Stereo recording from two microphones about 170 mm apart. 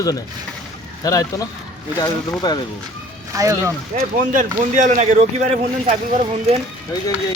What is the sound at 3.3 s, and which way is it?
Speech, 20° right (ahead or behind).